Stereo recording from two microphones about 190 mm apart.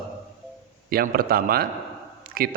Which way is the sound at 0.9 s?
50° right (ahead or behind).